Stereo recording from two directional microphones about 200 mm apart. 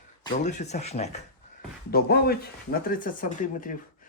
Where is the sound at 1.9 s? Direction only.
50° left (ahead or behind).